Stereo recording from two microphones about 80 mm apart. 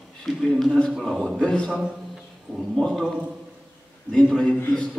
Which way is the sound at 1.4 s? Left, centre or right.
Centre.